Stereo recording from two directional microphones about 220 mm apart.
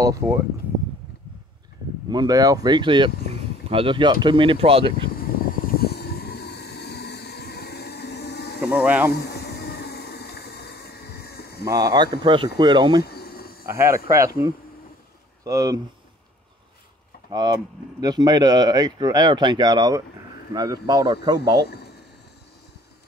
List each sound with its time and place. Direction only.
0.0 s speech: 15° right (ahead or behind)
2.0 s speech: 20° right (ahead or behind)
5.8 s a sound: 45° left (ahead or behind)
8.5 s speech: 5° right (ahead or behind)
9.3 s vehicle: 45° left (ahead or behind)
11.2 s a sound: 45° left (ahead or behind)
11.6 s speech: 15° right (ahead or behind)
13.0 s cricket: 45° left (ahead or behind)
13.7 s speech: 10° right (ahead or behind)
17.3 s speech: 20° right (ahead or behind)